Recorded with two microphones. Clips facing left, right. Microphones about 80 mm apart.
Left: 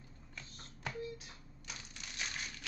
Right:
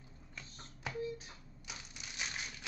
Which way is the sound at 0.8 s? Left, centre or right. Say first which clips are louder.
Right 1 dB; centre.